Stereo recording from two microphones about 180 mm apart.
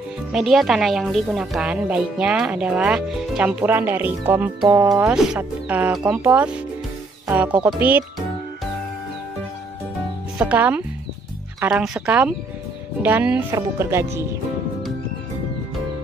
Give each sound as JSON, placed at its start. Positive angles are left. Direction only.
{"t": 0.3, "sound": "a woman's voice", "side_deg": 0}
{"t": 5.1, "sound": "speech", "side_deg": -5}
{"t": 10.5, "sound": "a woman's voice", "side_deg": -10}